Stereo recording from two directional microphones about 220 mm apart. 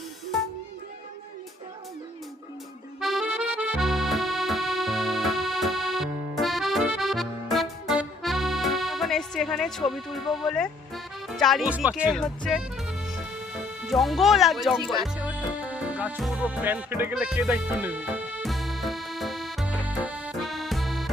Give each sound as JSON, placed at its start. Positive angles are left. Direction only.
{"t": 3.0, "sound": "accordion", "side_deg": 0}